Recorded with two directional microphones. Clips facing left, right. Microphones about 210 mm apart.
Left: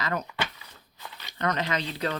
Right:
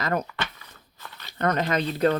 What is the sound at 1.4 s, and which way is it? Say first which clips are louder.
Speech: right 4 dB; 50° right (ahead or behind).